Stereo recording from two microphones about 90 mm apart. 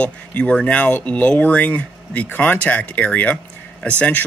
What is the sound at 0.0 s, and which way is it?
Speech, 15° left (ahead or behind).